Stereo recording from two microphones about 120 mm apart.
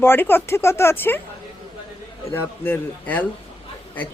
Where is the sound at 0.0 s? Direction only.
20° left (ahead or behind).